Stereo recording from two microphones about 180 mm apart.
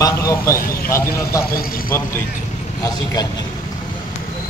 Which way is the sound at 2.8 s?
20° left (ahead or behind).